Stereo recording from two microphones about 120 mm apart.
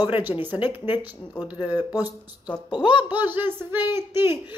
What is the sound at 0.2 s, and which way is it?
Speech, 15° right (ahead or behind).